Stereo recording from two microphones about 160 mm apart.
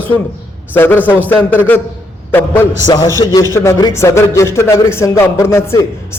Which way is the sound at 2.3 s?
10° left (ahead or behind).